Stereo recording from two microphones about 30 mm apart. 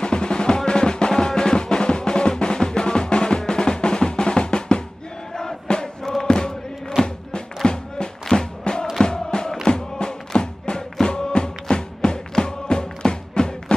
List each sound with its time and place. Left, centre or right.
0.0 s music: left
3.3 s drum: left
5.4 s music: left
6.2 s chant: left
7.0 s music: left